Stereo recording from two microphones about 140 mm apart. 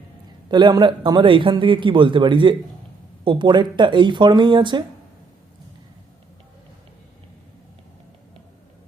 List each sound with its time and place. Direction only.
0.4 s a man's voice: 35° right (ahead or behind)